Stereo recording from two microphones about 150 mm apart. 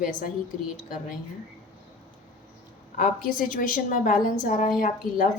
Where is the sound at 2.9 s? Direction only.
65° left (ahead or behind).